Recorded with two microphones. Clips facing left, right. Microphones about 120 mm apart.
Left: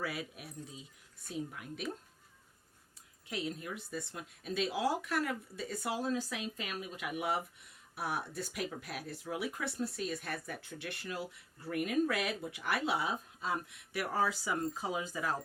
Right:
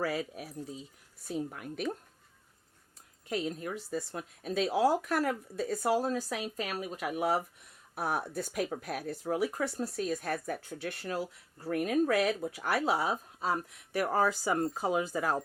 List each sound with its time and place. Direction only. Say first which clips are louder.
0.0 s speech: right 7 dB; 40° right (ahead or behind)
3.2 s speech: right 5 dB; 45° right (ahead or behind)